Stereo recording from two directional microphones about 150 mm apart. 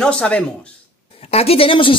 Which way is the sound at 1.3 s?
40° left (ahead or behind).